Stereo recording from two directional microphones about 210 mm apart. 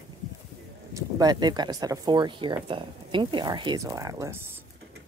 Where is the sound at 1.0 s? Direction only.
15° right (ahead or behind).